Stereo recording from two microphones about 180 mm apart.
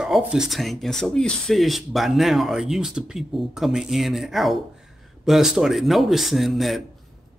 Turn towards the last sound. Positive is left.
turn(degrees=0)  # may be behind; listen again after turning